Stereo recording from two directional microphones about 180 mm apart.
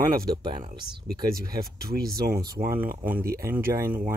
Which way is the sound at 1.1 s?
25° right (ahead or behind).